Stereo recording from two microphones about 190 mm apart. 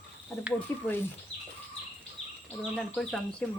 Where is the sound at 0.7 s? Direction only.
10° left (ahead or behind).